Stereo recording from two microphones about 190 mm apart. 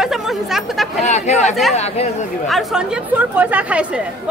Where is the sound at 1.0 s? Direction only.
35° left (ahead or behind).